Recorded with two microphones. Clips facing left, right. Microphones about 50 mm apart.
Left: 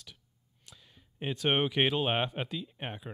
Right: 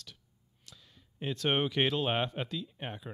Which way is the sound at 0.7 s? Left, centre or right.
Centre.